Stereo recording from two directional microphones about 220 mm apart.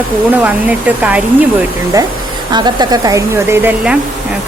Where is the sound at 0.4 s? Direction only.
5° right (ahead or behind).